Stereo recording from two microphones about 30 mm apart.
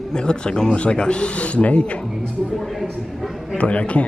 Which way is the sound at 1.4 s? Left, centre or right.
Left.